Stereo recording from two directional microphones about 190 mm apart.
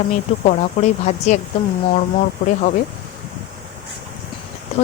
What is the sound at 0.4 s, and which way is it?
Speech, 35° left (ahead or behind).